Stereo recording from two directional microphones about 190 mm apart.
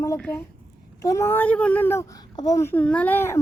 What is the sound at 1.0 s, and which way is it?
Speech, 15° left (ahead or behind).